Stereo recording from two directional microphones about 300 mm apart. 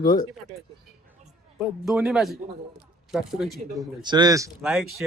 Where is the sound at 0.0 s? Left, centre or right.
Centre.